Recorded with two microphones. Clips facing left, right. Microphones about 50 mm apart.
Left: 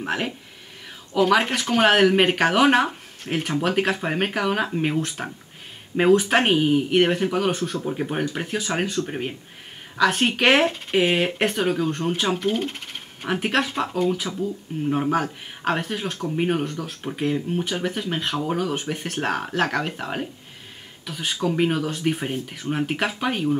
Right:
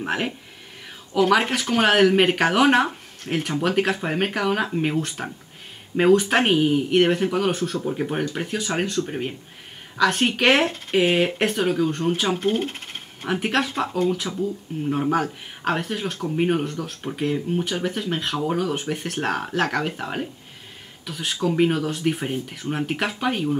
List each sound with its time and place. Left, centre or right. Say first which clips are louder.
0.0 s speech: right 1 dB; centre
1.3 s speech: even; centre
12.4 s speech: right 1 dB; right
13.2 s speech: even; centre